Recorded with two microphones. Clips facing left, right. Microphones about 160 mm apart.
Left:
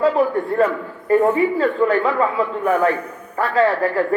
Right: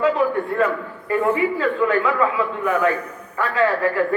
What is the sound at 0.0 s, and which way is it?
A man's voice, 35° left (ahead or behind).